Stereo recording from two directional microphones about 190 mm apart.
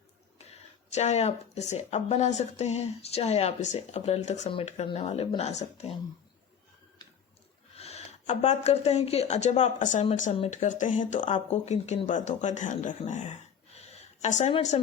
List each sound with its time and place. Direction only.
0.3 s speech: 35° left (ahead or behind)
7.8 s speech: 35° left (ahead or behind)
13.7 s a sound: 35° left (ahead or behind)